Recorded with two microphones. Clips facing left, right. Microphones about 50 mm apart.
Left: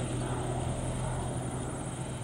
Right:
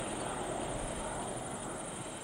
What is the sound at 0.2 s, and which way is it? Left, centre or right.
Vehicle, centre.